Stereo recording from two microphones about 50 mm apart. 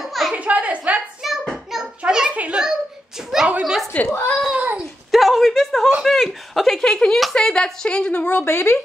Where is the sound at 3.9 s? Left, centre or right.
Left.